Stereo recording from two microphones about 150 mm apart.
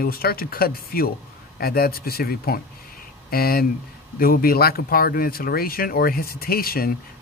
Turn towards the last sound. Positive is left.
turn(degrees=85)